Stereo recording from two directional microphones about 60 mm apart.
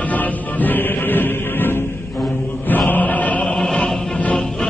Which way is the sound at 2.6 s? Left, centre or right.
Left.